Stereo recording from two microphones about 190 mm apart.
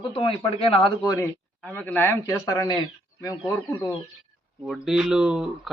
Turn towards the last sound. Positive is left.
turn(degrees=-5)  # may be behind; listen again after turning